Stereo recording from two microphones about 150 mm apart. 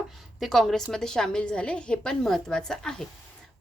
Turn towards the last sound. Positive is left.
turn(degrees=5)  # may be behind; listen again after turning